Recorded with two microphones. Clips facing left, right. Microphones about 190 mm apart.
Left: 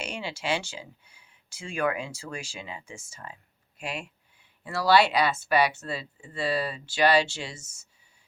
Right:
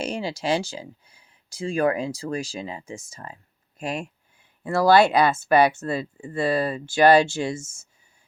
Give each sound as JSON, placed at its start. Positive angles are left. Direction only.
{"t": 0.0, "sound": "speech", "side_deg": -35}